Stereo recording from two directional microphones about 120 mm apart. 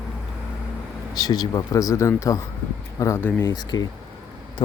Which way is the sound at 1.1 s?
35° left (ahead or behind).